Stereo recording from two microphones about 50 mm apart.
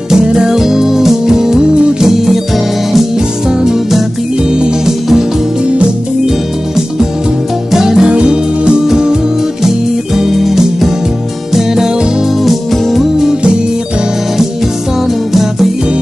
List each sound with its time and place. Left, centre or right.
0.1 s music: centre
2.0 s music: centre
3.4 s music: centre
7.7 s music: centre
8.1 s music: right
12.7 s music: centre
13.2 s music: centre